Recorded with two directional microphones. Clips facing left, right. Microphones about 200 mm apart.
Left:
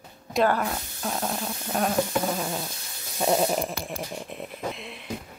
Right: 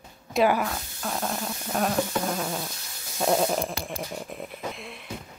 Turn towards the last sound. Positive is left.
turn(degrees=0)  # may be behind; listen again after turning